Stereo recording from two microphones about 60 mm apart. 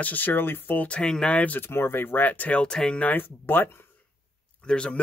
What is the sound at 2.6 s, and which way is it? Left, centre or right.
Speech, centre.